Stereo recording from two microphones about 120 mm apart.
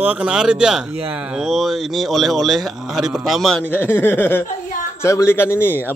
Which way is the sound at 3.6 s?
15° left (ahead or behind).